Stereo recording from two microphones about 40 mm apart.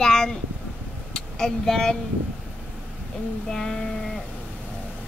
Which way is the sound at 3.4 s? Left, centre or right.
Centre.